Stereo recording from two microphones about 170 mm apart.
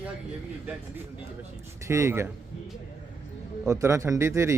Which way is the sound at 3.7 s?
15° right (ahead or behind).